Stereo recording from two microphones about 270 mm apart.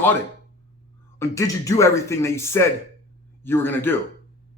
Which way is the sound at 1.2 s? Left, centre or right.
Centre.